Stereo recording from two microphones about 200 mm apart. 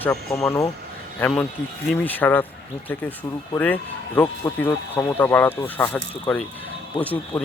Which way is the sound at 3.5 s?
10° left (ahead or behind).